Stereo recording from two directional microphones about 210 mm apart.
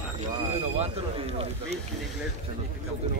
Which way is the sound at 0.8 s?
30° right (ahead or behind).